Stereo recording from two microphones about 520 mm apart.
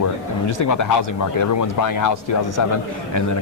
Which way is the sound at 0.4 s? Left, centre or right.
Left.